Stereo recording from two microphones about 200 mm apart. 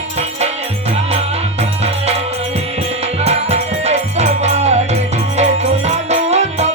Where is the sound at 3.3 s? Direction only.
30° right (ahead or behind).